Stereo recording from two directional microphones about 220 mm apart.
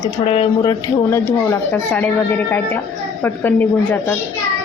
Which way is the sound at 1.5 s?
10° left (ahead or behind).